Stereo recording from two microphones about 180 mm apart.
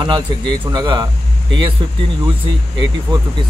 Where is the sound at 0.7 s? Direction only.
25° right (ahead or behind).